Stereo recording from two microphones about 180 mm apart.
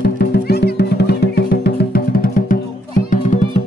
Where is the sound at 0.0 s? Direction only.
60° left (ahead or behind).